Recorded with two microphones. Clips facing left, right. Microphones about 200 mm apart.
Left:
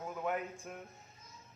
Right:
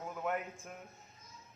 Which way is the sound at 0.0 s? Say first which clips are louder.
Left 1 dB; centre (ahead or behind).